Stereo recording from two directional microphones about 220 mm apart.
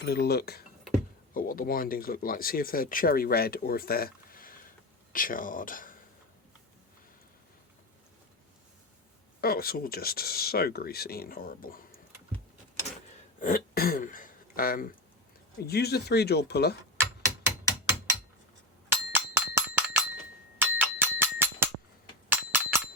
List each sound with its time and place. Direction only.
0.0 s speech: 45° left (ahead or behind)
9.4 s speech: 45° left (ahead or behind)
13.4 s speech: 40° left (ahead or behind)
18.9 s a sound: 10° right (ahead or behind)